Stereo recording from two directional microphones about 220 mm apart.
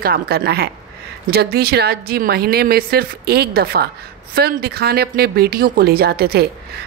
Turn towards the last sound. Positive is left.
turn(degrees=-45)  # may be behind; listen again after turning